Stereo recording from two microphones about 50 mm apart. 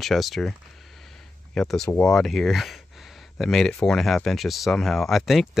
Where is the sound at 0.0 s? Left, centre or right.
Centre.